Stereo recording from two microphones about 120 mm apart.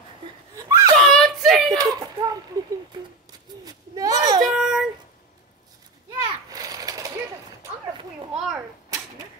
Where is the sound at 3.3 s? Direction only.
30° right (ahead or behind).